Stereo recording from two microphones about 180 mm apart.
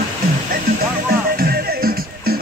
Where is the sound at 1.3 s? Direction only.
55° right (ahead or behind).